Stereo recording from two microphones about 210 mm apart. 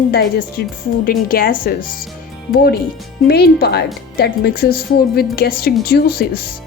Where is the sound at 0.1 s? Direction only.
45° left (ahead or behind).